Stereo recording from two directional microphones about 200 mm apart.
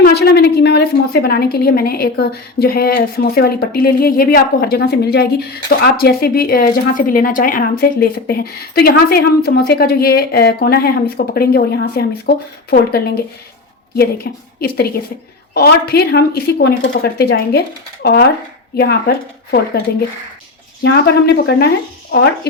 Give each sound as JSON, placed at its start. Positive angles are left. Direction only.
{"t": 0.0, "sound": "a woman's voice", "side_deg": 50}
{"t": 14.3, "sound": "a woman's voice", "side_deg": 55}
{"t": 20.8, "sound": "a woman's voice", "side_deg": 55}